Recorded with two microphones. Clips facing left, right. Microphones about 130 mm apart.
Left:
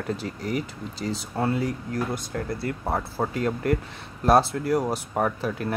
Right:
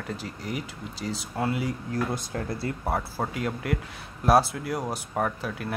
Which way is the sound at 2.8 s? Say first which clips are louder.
Left 2 dB; 5° right (ahead or behind).